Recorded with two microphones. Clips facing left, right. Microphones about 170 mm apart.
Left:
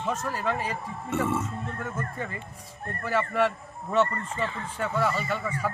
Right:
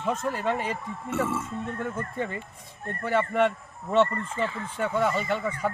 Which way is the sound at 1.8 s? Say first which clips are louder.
Right 3 dB; 30° right (ahead or behind).